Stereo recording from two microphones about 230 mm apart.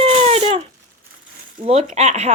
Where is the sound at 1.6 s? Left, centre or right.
Right.